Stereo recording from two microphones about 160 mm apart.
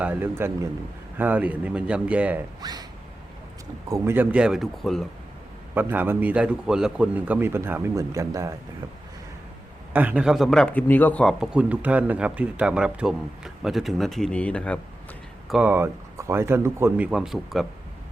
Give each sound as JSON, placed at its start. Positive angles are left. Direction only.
{"t": 0.0, "sound": "a man's voice", "side_deg": -10}
{"t": 2.6, "sound": "speech", "side_deg": -25}
{"t": 3.8, "sound": "a man's voice", "side_deg": -20}
{"t": 5.7, "sound": "a man's voice", "side_deg": -10}
{"t": 9.9, "sound": "speech", "side_deg": -10}
{"t": 11.5, "sound": "speech", "side_deg": -10}
{"t": 15.4, "sound": "a man's voice", "side_deg": -5}
{"t": 17.1, "sound": "speech", "side_deg": -5}